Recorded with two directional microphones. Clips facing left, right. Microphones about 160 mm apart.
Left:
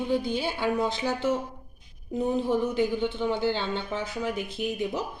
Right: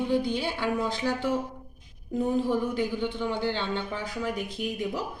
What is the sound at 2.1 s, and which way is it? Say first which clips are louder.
Speech: even; centre (ahead or behind).